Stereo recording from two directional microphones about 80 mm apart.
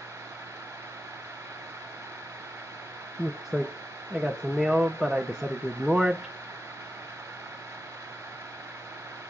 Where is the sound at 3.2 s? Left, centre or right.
Right.